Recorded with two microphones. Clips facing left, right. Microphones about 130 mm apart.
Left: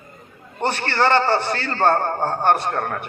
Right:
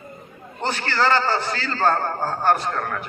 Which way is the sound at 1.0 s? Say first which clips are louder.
Left 3 dB; 60° left (ahead or behind).